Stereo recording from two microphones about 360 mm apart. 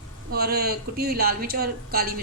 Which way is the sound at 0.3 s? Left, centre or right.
Right.